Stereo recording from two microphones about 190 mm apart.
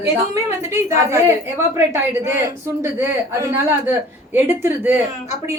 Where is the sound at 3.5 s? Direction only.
10° right (ahead or behind).